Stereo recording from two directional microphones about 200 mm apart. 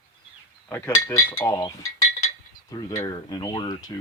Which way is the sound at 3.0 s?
20° left (ahead or behind).